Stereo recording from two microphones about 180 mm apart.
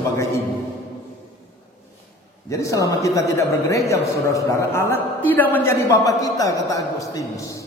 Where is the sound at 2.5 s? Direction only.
15° left (ahead or behind).